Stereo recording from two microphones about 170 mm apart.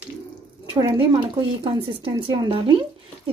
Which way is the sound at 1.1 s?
35° right (ahead or behind).